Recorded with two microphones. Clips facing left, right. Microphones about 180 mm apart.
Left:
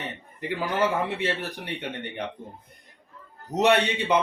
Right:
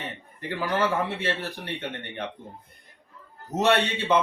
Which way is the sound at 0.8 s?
15° left (ahead or behind).